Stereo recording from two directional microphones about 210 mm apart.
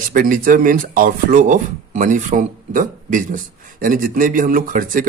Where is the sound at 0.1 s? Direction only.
40° right (ahead or behind).